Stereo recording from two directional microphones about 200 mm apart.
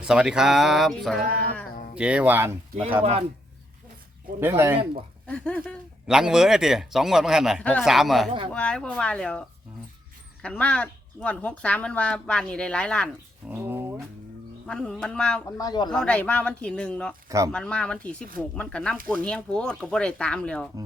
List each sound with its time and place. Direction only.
0.0 s a man's voice: 5° right (ahead or behind)
3.0 s speech: 30° right (ahead or behind)
4.4 s speech: 10° right (ahead or behind)
5.2 s a man's voice: 5° left (ahead or behind)
13.5 s a sound: 10° right (ahead or behind)
14.7 s a man's voice: 5° left (ahead or behind)
15.5 s a man's voice: 20° left (ahead or behind)
15.9 s a man's voice: 5° left (ahead or behind)
17.2 s speech: 15° right (ahead or behind)
17.5 s a man's voice: 5° left (ahead or behind)